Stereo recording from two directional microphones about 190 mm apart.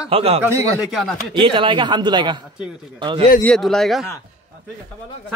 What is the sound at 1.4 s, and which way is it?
A man's voice, 25° right (ahead or behind).